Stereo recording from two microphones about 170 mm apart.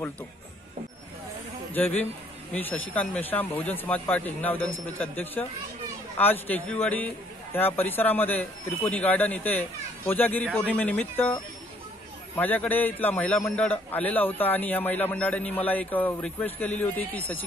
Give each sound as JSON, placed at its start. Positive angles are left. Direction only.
{"t": 1.7, "sound": "a man's voice", "side_deg": 10}